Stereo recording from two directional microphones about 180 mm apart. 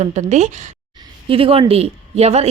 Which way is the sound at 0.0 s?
40° right (ahead or behind).